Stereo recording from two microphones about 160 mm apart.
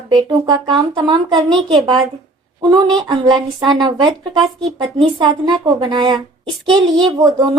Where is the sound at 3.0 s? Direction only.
30° right (ahead or behind).